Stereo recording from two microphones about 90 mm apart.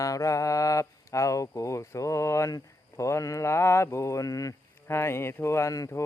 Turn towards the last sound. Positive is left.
turn(degrees=40)  # may be behind; listen again after turning